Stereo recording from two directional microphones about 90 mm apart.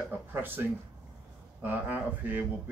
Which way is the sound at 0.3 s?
25° right (ahead or behind).